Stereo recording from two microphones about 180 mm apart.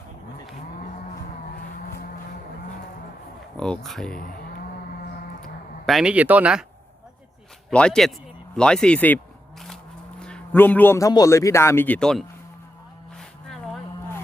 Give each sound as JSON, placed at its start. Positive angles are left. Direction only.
{"t": 3.8, "sound": "speech", "side_deg": 0}
{"t": 4.1, "sound": "moo", "side_deg": 50}
{"t": 5.4, "sound": "a sound", "side_deg": 0}
{"t": 7.7, "sound": "a man's voice", "side_deg": 5}